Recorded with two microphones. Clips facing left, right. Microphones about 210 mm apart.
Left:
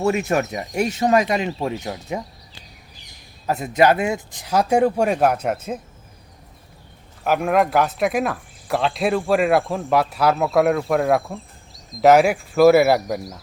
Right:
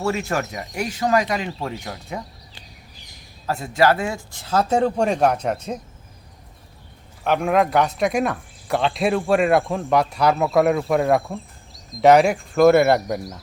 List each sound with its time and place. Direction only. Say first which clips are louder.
0.0 s speech: left 4 dB; 20° left (ahead or behind)
3.4 s speech: left 2 dB; 20° left (ahead or behind)
7.3 s speech: even; 5° left (ahead or behind)